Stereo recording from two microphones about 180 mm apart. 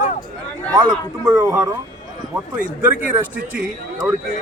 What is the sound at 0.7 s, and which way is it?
Speech, 25° right (ahead or behind).